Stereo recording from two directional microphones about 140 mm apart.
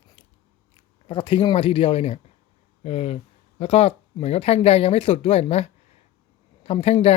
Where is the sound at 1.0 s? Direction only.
40° left (ahead or behind).